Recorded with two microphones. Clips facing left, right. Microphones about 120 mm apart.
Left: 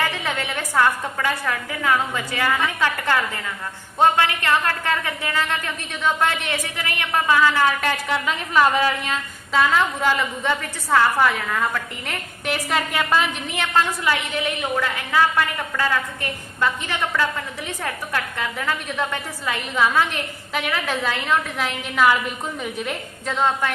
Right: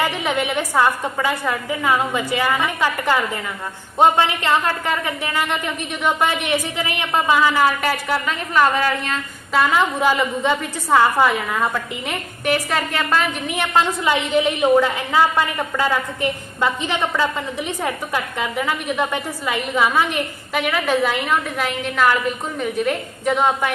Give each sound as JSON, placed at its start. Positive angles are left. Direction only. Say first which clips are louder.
{"t": 0.0, "sound": "a woman's voice", "louder": "right 4 dB", "side_deg": -15}
{"t": 9.5, "sound": "a woman's voice", "louder": "right 2 dB", "side_deg": -5}
{"t": 12.7, "sound": "a woman's voice", "louder": "right 1 dB", "side_deg": 5}
{"t": 13.5, "sound": "a woman's voice", "louder": "right 4 dB", "side_deg": -15}
{"t": 23.2, "sound": "a woman's voice", "louder": "right 3 dB", "side_deg": -15}